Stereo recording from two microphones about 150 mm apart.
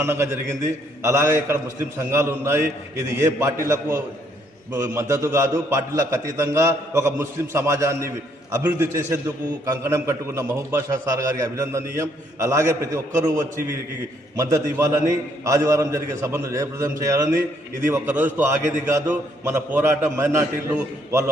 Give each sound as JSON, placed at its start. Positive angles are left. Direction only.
{"t": 0.0, "sound": "a man's voice", "side_deg": -15}